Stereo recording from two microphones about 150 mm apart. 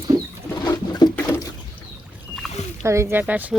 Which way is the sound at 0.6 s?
25° left (ahead or behind).